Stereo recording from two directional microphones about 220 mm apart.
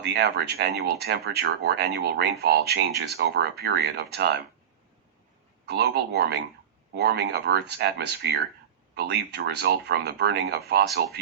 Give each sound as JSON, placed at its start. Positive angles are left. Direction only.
{"t": 0.0, "sound": "speech", "side_deg": -45}
{"t": 5.6, "sound": "speech", "side_deg": -45}